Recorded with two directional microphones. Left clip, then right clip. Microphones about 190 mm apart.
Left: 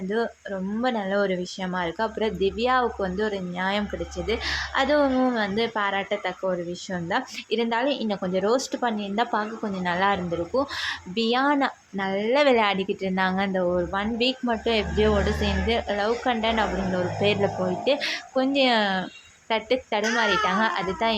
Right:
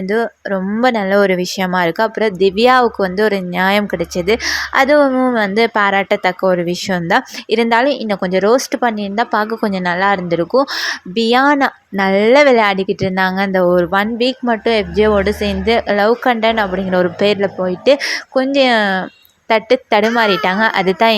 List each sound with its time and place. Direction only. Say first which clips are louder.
0.1 s speech: right 10 dB; 35° right (ahead or behind)